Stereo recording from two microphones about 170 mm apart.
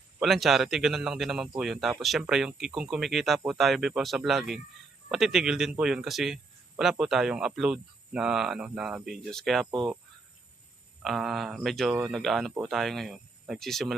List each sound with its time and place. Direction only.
0.2 s speech: centre (ahead or behind)
11.0 s speech: centre (ahead or behind)